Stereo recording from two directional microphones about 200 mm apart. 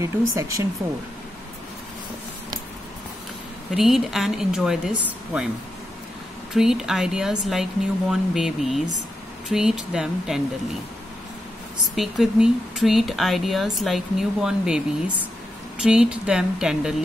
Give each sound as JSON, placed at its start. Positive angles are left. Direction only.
{"t": 0.0, "sound": "speech", "side_deg": -15}
{"t": 3.7, "sound": "speech", "side_deg": 0}
{"t": 6.5, "sound": "speech", "side_deg": 0}
{"t": 11.9, "sound": "speech", "side_deg": 0}
{"t": 15.8, "sound": "speech", "side_deg": -5}